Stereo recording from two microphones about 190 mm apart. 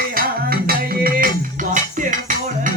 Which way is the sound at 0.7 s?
50° right (ahead or behind).